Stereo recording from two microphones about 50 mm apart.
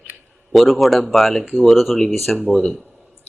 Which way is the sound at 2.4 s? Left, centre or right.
Left.